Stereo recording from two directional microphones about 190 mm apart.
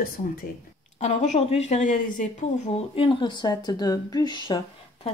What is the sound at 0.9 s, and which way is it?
A woman's voice, 40° left (ahead or behind).